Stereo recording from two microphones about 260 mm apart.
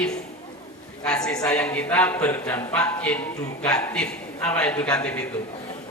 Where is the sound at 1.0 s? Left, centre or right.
Centre.